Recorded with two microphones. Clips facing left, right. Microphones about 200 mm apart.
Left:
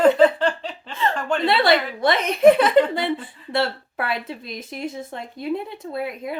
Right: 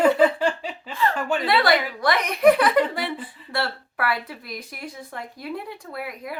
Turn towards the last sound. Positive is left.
turn(degrees=25)  # may be behind; listen again after turning